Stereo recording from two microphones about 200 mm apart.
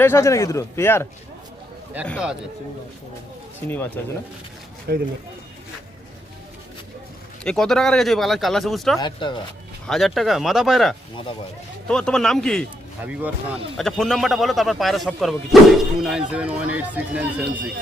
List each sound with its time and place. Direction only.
0.0 s speech: 15° left (ahead or behind)
2.0 s speech: 5° left (ahead or behind)
3.7 s speech: 10° left (ahead or behind)
4.9 s speech: 55° right (ahead or behind)
7.4 s speech: centre (ahead or behind)
9.0 s speech: 25° left (ahead or behind)
9.8 s speech: centre (ahead or behind)
13.7 s speech: centre (ahead or behind)